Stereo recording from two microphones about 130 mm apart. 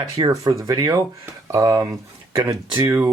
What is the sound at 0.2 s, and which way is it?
Speech, 30° right (ahead or behind).